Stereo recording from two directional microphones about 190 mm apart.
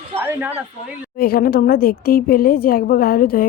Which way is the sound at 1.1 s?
50° left (ahead or behind).